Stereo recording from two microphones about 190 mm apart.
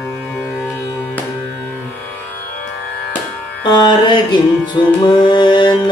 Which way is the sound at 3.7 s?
25° left (ahead or behind).